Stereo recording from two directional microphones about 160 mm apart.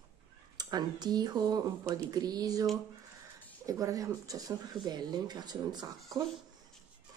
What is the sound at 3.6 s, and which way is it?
Speech, 20° right (ahead or behind).